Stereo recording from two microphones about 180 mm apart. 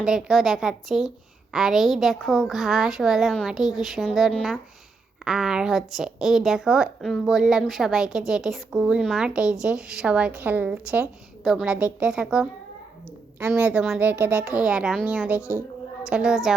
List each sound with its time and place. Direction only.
0.0 s a woman's voice: 5° right (ahead or behind)
13.5 s a woman's voice: 5° right (ahead or behind)